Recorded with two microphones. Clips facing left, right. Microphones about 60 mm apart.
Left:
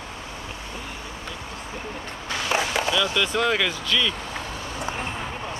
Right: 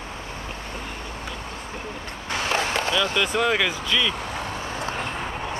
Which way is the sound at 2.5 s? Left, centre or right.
Centre.